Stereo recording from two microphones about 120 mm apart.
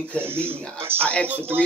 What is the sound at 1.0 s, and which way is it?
Speech, 10° left (ahead or behind).